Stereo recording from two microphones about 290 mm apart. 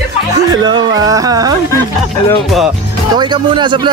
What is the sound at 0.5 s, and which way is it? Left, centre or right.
Music, centre.